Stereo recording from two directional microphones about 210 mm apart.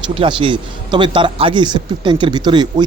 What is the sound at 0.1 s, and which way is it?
Speech, 25° right (ahead or behind).